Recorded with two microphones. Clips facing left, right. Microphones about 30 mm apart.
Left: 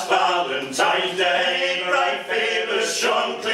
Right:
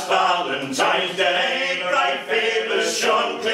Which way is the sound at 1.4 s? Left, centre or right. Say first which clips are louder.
Even; centre.